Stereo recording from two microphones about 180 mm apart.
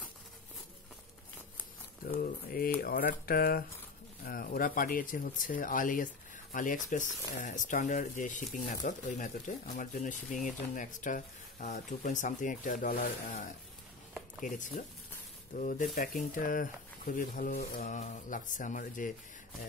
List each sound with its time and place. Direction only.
2.0 s speech: 50° left (ahead or behind)